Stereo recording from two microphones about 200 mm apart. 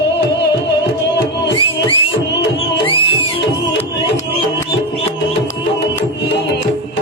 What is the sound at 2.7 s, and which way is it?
Music, 25° left (ahead or behind).